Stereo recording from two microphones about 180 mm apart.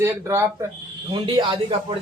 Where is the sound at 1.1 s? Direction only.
25° right (ahead or behind).